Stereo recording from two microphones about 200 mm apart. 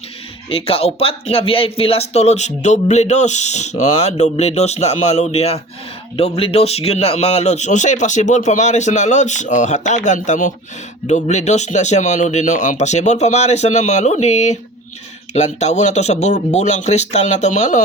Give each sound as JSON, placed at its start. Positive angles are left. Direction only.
{"t": 0.5, "sound": "speech", "side_deg": 30}